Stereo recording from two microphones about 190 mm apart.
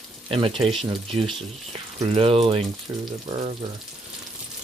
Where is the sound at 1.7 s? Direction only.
30° right (ahead or behind).